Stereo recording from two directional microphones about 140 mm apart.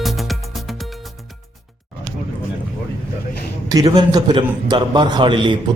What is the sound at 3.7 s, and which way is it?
A man's voice, 30° right (ahead or behind).